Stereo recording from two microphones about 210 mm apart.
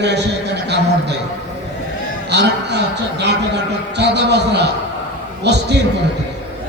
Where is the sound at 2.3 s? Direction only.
55° right (ahead or behind).